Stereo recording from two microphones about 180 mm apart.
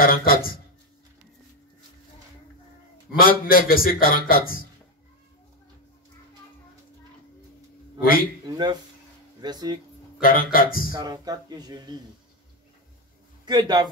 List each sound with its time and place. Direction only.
0.0 s a man's voice: 55° left (ahead or behind)
3.1 s a man's voice: 55° left (ahead or behind)
8.0 s a man's voice: 55° left (ahead or behind)
8.5 s speech: 25° right (ahead or behind)
10.2 s a man's voice: 55° left (ahead or behind)
10.9 s speech: 20° right (ahead or behind)
13.5 s speech: 25° right (ahead or behind)